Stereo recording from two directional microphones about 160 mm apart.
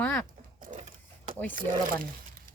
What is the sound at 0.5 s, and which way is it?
Printer, 60° right (ahead or behind).